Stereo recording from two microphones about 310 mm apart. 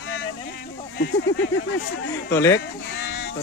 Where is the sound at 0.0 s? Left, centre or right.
Left.